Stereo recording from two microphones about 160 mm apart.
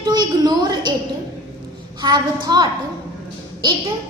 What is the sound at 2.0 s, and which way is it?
Speech, 25° right (ahead or behind).